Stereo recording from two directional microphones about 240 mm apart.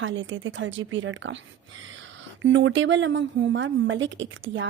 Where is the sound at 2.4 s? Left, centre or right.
Right.